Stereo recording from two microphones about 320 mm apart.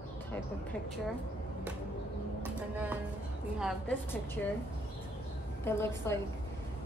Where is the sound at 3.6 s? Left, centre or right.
Centre.